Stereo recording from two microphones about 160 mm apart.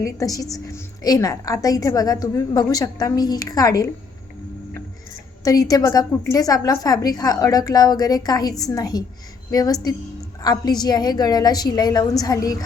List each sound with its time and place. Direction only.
0.0 s a woman's voice: 20° left (ahead or behind)
5.4 s a woman's voice: 25° left (ahead or behind)